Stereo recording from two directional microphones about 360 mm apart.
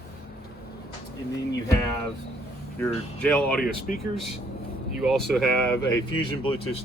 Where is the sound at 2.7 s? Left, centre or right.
Centre.